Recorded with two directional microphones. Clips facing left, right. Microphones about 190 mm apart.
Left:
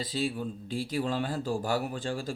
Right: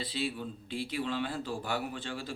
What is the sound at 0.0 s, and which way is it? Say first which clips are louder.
Speech: left 4 dB; 40° left (ahead or behind).